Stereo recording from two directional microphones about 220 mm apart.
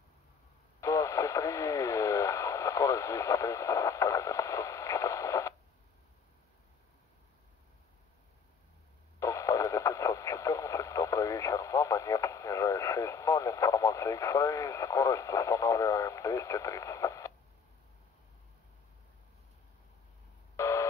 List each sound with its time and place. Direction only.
0.7 s radio: 15° left (ahead or behind)
9.2 s radio: 15° left (ahead or behind)
20.5 s busy signal: 15° left (ahead or behind)